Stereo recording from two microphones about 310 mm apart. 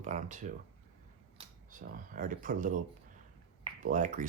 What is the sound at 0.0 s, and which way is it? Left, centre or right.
Speech, right.